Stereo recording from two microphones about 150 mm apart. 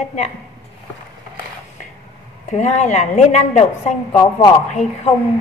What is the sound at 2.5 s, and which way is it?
A woman's voice, 50° left (ahead or behind).